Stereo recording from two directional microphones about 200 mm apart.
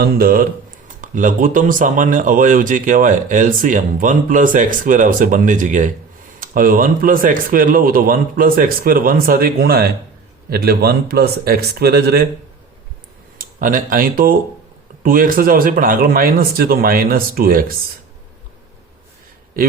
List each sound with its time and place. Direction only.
0.0 s speech: 45° right (ahead or behind)
13.4 s speech: 40° right (ahead or behind)